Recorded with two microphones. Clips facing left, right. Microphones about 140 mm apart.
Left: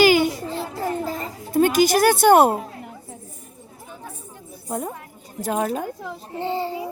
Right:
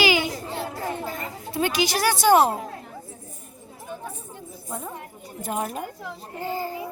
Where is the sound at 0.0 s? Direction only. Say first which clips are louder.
Left 6 dB; 45° left (ahead or behind).